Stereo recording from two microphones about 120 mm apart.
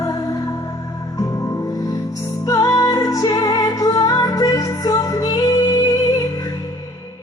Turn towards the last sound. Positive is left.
turn(degrees=30)  # may be behind; listen again after turning